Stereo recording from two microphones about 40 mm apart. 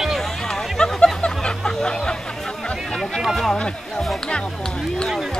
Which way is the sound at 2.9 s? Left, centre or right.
Centre.